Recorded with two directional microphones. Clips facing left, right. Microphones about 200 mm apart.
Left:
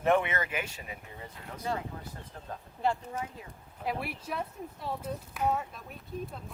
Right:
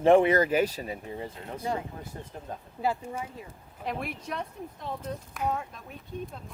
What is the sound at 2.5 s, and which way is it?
Speech, 20° right (ahead or behind).